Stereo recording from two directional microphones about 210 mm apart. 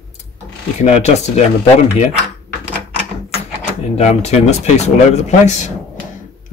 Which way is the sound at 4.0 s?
30° left (ahead or behind).